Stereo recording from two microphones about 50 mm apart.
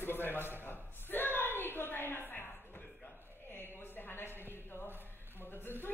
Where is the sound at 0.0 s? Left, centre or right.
Left.